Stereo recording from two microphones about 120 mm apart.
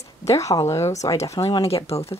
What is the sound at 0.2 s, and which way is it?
Speech, 25° left (ahead or behind).